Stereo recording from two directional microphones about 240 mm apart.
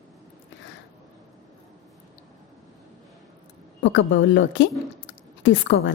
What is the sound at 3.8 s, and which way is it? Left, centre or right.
A woman's voice, left.